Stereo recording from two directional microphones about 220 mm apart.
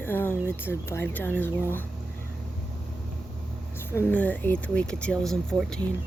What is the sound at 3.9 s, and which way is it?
Speech, 10° left (ahead or behind).